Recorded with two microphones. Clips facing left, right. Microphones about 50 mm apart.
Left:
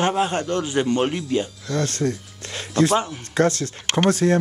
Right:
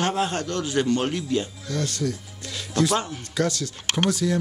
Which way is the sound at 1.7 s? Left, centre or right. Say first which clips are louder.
Left 5 dB; left.